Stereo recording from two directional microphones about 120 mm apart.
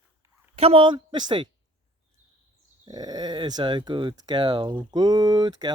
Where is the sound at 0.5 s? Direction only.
55° right (ahead or behind).